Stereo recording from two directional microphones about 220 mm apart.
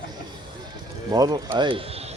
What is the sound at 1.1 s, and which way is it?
Speech, 20° right (ahead or behind).